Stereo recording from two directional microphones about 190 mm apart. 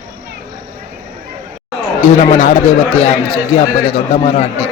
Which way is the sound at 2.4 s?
50° left (ahead or behind).